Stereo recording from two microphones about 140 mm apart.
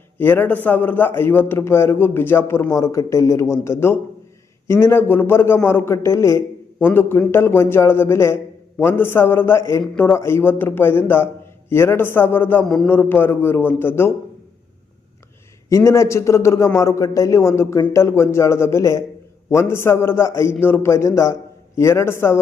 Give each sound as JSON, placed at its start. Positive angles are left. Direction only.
{"t": 0.2, "sound": "a man's voice", "side_deg": 15}
{"t": 15.7, "sound": "a man's voice", "side_deg": 20}